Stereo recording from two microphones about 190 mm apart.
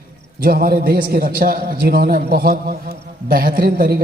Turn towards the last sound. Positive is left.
turn(degrees=-50)  # may be behind; listen again after turning